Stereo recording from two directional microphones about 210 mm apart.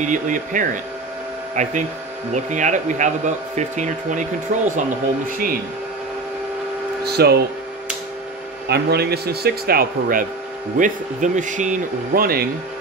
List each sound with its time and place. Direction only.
0.0 s a man's voice: 35° right (ahead or behind)
7.1 s a man's voice: 50° right (ahead or behind)
8.6 s a man's voice: 50° right (ahead or behind)